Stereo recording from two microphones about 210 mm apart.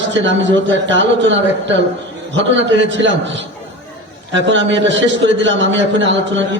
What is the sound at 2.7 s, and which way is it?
A man's voice, 60° right (ahead or behind).